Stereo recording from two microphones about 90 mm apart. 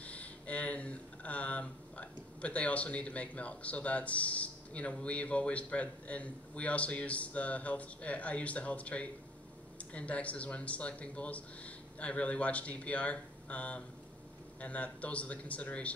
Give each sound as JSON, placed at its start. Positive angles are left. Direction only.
{"t": 0.0, "sound": "speech", "side_deg": 15}